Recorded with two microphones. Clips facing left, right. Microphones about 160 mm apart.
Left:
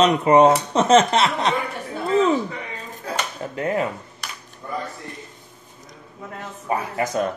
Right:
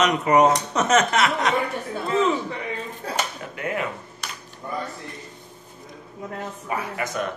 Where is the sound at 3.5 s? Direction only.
35° left (ahead or behind).